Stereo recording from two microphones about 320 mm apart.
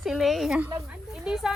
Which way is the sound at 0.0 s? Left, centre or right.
Centre.